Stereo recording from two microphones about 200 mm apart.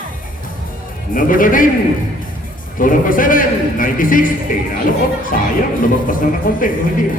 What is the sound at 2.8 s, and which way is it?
A man's voice, 45° left (ahead or behind).